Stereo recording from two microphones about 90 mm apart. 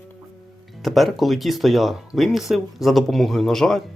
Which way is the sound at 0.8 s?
Centre (ahead or behind).